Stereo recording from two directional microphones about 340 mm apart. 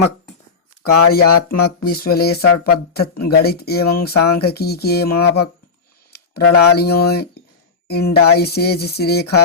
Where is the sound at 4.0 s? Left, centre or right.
Left.